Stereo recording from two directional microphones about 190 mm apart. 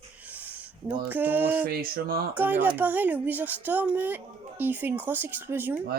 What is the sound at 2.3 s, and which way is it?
Speech, 10° right (ahead or behind).